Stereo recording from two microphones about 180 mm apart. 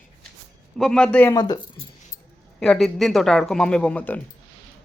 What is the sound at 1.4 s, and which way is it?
Speech, 25° left (ahead or behind).